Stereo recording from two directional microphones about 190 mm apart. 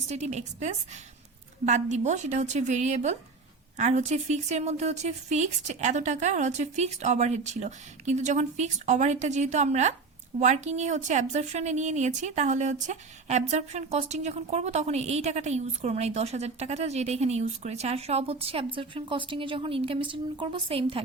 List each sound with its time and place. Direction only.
0.1 s a woman's voice: 35° right (ahead or behind)